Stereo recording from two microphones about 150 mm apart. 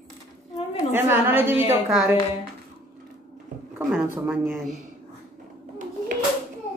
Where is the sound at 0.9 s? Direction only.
15° right (ahead or behind).